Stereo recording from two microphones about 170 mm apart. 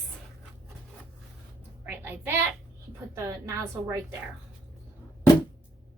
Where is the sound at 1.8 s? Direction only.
10° right (ahead or behind).